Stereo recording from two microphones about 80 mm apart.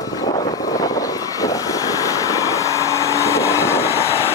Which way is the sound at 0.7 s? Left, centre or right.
Left.